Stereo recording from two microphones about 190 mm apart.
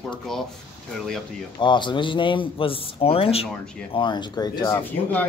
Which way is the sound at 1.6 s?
25° left (ahead or behind).